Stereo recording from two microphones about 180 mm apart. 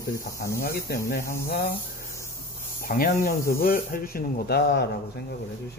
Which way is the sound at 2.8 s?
50° left (ahead or behind).